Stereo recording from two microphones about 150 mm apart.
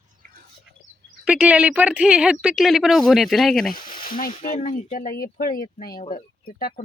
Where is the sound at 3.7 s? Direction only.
70° left (ahead or behind).